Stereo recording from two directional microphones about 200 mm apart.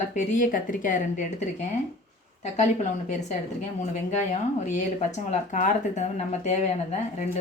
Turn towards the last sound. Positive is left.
turn(degrees=35)  # may be behind; listen again after turning